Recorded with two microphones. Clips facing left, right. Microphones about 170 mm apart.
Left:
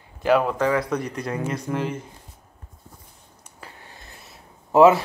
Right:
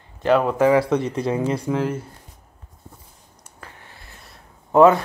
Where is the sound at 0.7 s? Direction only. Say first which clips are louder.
Right 6 dB; 30° right (ahead or behind).